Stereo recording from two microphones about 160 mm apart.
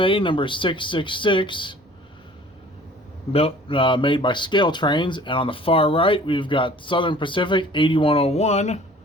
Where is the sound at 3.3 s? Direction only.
35° left (ahead or behind).